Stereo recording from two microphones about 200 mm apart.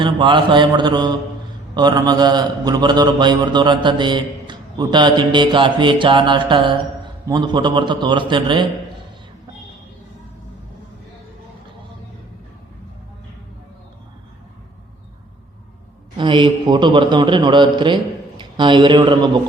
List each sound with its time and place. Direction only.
0.0 s a man's voice: 25° right (ahead or behind)
16.1 s a man's voice: 25° right (ahead or behind)